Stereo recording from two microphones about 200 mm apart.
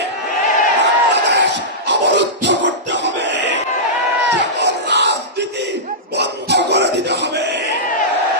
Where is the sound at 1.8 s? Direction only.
60° right (ahead or behind).